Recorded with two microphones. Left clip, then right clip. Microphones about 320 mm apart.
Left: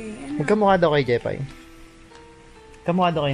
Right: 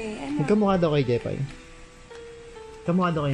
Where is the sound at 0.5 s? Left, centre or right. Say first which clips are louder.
Left 5 dB; left.